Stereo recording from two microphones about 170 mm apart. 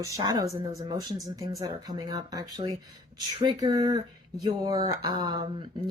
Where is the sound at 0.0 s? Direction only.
20° right (ahead or behind).